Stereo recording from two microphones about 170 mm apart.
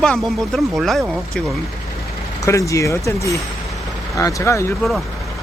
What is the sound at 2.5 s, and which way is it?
Speech, 20° left (ahead or behind).